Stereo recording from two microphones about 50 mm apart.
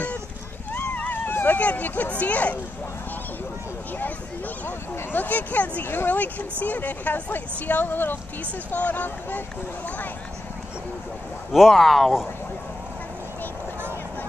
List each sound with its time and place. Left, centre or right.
1.1 s speech: left
4.6 s speech: left
11.7 s speech: centre